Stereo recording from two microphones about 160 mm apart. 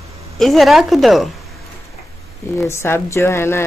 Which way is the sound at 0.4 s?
Centre (ahead or behind).